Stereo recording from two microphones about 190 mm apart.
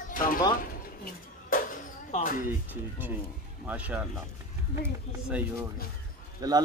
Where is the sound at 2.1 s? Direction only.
45° left (ahead or behind).